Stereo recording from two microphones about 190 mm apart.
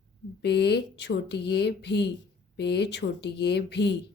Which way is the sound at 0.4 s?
65° left (ahead or behind).